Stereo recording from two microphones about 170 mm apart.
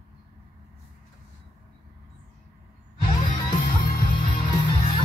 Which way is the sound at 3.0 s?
30° left (ahead or behind).